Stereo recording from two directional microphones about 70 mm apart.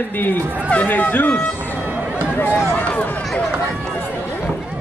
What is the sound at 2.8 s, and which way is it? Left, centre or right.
Speech, left.